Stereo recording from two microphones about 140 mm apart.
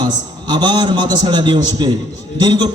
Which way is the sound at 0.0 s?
30° right (ahead or behind).